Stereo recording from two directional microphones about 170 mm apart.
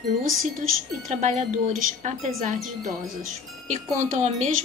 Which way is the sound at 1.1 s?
45° right (ahead or behind).